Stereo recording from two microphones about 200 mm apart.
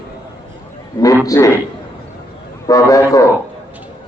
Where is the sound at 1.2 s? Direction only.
15° left (ahead or behind).